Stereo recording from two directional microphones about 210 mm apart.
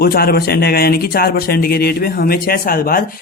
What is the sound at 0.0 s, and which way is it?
Speech, 45° left (ahead or behind).